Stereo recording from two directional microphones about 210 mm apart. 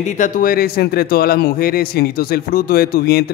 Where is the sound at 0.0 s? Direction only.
35° left (ahead or behind).